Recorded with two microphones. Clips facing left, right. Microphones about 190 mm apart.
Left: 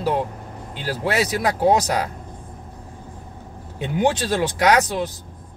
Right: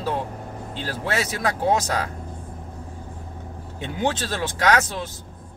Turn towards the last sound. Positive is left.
turn(degrees=20)  # may be behind; listen again after turning